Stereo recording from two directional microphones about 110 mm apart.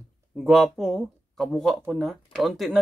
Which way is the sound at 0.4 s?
Centre (ahead or behind).